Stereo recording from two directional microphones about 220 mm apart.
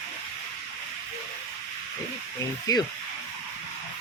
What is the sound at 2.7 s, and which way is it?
Speech, 15° left (ahead or behind).